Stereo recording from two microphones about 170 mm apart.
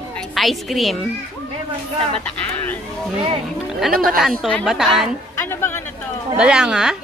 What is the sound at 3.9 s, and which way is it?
Speech, 60° right (ahead or behind).